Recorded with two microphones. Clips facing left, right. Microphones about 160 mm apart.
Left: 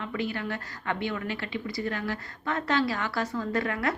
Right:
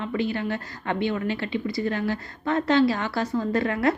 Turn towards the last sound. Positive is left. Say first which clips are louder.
# right 5 dB
turn(degrees=-25)  # may be behind; listen again after turning